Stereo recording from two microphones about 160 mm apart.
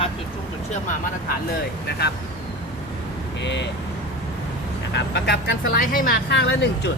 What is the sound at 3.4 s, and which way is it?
Speech, 90° left.